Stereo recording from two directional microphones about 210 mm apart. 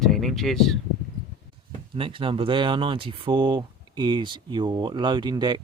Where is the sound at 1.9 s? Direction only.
25° right (ahead or behind).